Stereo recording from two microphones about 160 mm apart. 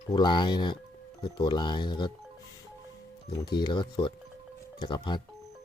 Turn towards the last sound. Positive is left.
turn(degrees=30)  # may be behind; listen again after turning